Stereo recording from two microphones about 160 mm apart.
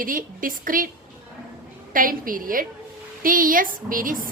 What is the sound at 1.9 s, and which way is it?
A woman's voice, 60° right (ahead or behind).